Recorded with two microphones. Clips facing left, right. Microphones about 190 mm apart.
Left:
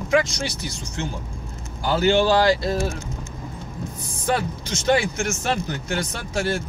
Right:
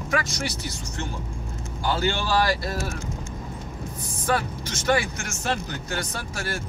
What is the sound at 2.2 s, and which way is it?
Speech, 20° left (ahead or behind).